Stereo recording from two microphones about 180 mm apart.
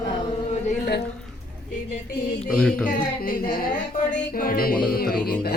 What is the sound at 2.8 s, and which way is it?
Music, 50° left (ahead or behind).